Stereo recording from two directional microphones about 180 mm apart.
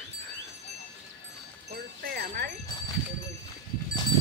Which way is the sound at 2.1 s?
60° right (ahead or behind).